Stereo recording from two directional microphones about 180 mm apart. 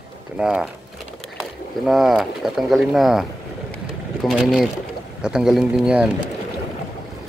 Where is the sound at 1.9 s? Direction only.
Centre (ahead or behind).